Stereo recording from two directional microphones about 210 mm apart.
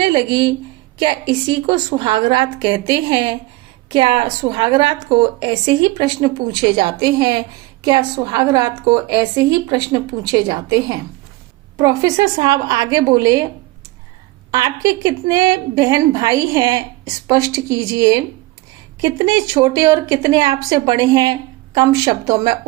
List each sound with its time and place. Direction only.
0.0 s a woman's voice: 20° right (ahead or behind)
14.5 s a woman's voice: 15° right (ahead or behind)